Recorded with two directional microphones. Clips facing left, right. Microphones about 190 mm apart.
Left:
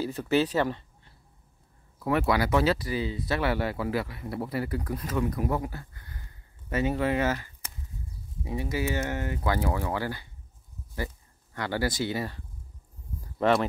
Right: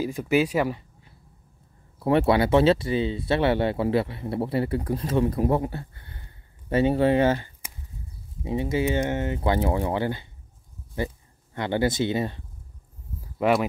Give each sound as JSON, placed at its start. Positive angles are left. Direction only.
{"t": 0.0, "sound": "speech", "side_deg": -10}
{"t": 2.0, "sound": "speech", "side_deg": -30}
{"t": 11.5, "sound": "speech", "side_deg": -20}
{"t": 13.2, "sound": "a sound", "side_deg": -10}